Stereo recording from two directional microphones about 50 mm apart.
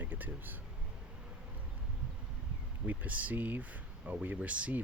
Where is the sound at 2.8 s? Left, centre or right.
Right.